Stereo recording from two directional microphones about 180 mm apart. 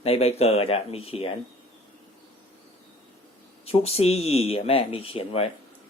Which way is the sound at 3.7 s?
35° left (ahead or behind).